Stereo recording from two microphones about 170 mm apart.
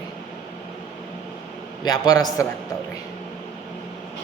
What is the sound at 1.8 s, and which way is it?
Speech, 25° left (ahead or behind).